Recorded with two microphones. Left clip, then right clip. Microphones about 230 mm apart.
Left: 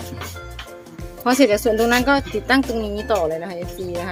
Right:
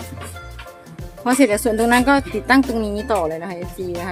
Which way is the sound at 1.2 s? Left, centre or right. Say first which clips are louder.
Left 1 dB; centre.